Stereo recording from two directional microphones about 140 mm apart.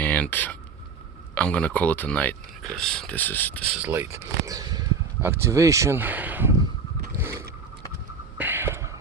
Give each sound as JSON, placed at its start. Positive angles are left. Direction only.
{"t": 0.0, "sound": "a sound", "side_deg": 10}
{"t": 1.4, "sound": "speech", "side_deg": 10}
{"t": 3.7, "sound": "speech", "side_deg": -10}
{"t": 7.2, "sound": "boat", "side_deg": -15}
{"t": 8.4, "sound": "whispering", "side_deg": -15}